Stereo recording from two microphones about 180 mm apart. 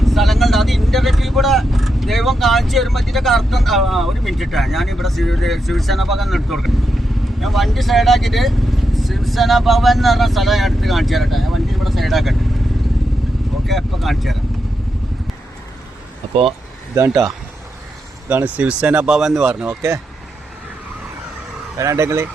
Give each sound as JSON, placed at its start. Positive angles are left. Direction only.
{"t": 0.0, "sound": "speech", "side_deg": 0}
{"t": 13.7, "sound": "speech", "side_deg": 0}
{"t": 16.3, "sound": "speech", "side_deg": -30}
{"t": 18.3, "sound": "speech", "side_deg": -10}
{"t": 21.8, "sound": "speech", "side_deg": -15}